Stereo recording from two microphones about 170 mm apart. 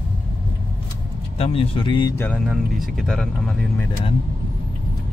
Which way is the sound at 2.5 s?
Centre (ahead or behind).